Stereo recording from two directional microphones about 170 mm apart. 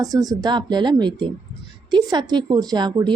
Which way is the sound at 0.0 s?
20° right (ahead or behind).